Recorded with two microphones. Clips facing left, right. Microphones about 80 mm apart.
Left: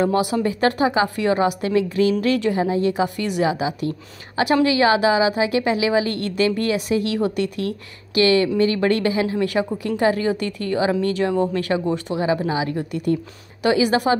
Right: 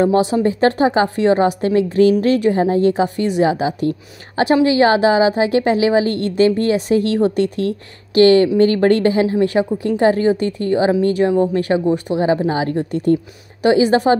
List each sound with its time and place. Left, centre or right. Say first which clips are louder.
0.0 s a woman's voice: right 5 dB; right
12.4 s a woman's voice: right 4 dB; right